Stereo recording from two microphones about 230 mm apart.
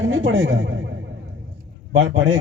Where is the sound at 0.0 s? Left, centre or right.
Right.